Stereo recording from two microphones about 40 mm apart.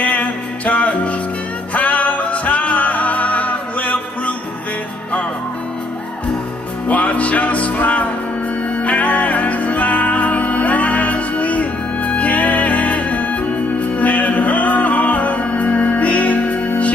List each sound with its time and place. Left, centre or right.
0.0 s music: left
6.9 s music: left